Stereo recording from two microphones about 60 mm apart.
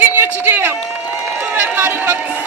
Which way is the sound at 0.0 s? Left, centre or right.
Right.